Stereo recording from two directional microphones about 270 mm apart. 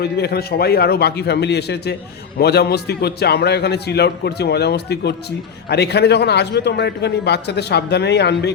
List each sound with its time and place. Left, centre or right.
0.0 s a man's voice: left